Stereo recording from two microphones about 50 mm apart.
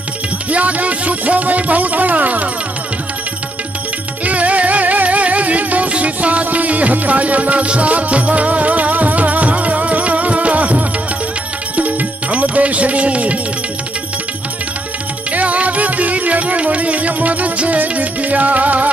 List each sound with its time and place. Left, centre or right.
0.5 s music: right
4.2 s music: right
15.3 s music: right